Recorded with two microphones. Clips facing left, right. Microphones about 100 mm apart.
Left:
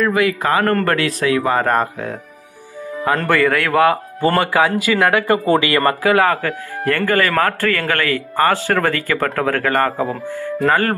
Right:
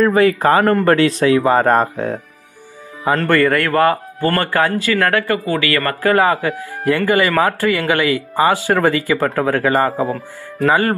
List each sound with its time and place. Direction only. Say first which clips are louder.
0.0 s a man's voice: right 4 dB; 35° right (ahead or behind)
3.3 s speech: right 2 dB; centre (ahead or behind); by 5.9 s 20° left (ahead or behind)
6.0 s speech: right 5 dB; 5° right (ahead or behind)